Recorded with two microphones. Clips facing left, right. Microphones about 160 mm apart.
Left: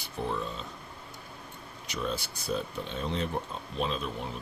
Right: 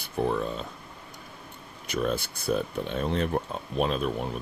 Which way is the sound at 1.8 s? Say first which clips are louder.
Right 6 dB; 55° right (ahead or behind).